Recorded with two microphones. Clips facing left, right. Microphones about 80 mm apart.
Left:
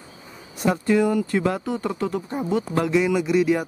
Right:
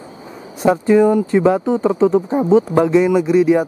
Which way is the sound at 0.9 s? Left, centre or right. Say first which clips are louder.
Right 9 dB; right.